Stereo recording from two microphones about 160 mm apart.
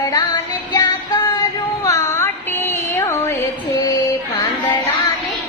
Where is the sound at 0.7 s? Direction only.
25° left (ahead or behind).